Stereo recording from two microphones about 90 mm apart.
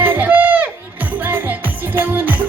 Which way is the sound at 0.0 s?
20° right (ahead or behind).